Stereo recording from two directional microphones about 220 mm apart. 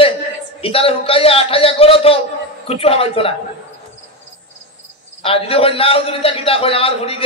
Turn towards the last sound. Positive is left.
turn(degrees=25)  # may be behind; listen again after turning